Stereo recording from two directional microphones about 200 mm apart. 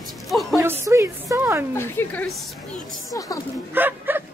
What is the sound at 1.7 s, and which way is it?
Speech, 10° left (ahead or behind).